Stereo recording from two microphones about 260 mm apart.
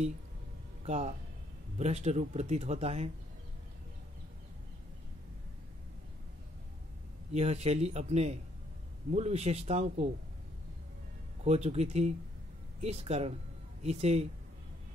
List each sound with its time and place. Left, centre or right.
0.8 s speech: right
7.3 s speech: right
11.4 s speech: right